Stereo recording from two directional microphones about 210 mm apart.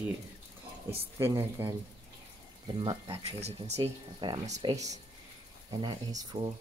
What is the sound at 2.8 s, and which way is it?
Speech, 25° right (ahead or behind).